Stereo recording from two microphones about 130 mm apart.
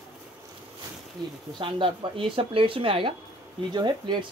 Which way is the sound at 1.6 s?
40° right (ahead or behind).